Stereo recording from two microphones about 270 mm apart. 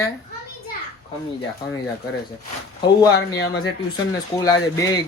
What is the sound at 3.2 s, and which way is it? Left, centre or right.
Speech, left.